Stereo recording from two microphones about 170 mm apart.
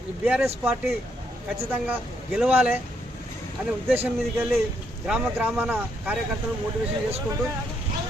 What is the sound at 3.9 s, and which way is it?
Speech, 10° right (ahead or behind).